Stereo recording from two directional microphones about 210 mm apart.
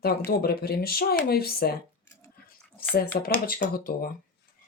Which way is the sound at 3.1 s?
50° left (ahead or behind).